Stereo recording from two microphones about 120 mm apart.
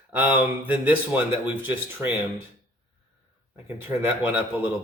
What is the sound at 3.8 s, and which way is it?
Speech, 15° right (ahead or behind).